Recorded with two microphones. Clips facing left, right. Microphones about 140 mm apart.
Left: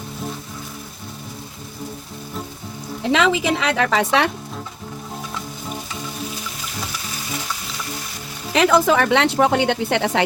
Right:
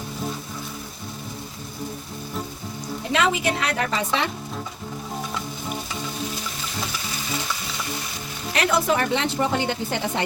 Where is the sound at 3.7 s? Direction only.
90° left; by 4.3 s 70° left (ahead or behind).